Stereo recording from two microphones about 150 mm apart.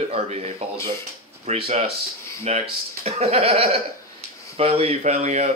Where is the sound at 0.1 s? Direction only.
40° right (ahead or behind).